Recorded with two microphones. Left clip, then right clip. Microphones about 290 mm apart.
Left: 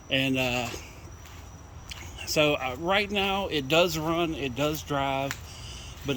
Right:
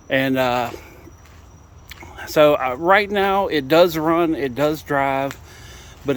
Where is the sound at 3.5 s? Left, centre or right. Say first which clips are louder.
Right 8 dB; centre.